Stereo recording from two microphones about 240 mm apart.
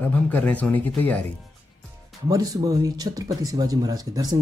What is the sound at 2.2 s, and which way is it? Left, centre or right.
Speech, centre.